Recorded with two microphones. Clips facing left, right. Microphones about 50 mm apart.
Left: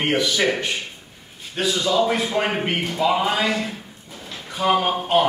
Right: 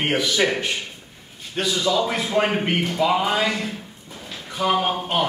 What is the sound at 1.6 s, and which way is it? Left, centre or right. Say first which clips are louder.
Speech: left 1 dB; centre.